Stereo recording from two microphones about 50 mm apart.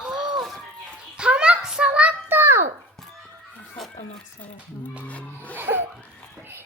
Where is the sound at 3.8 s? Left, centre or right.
Centre.